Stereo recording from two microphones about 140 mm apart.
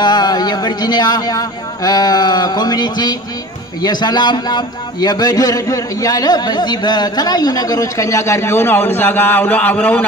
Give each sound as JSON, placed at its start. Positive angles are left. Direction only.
{"t": 0.0, "sound": "a man's voice", "side_deg": 30}